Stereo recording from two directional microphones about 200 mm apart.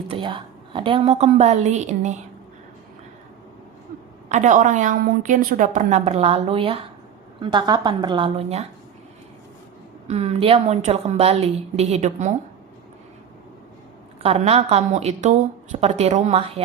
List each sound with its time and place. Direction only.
0.1 s a woman's voice: 25° right (ahead or behind)
4.3 s a woman's voice: 40° right (ahead or behind)
10.1 s a woman's voice: 30° right (ahead or behind)
14.2 s a woman's voice: 30° right (ahead or behind)